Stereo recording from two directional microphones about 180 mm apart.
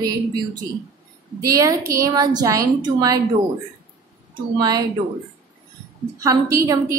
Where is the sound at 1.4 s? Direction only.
20° right (ahead or behind).